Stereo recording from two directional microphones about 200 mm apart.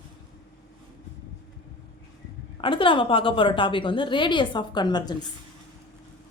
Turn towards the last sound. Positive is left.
turn(degrees=20)  # may be behind; listen again after turning